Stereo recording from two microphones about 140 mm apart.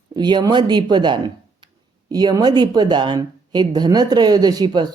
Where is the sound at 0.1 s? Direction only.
30° right (ahead or behind).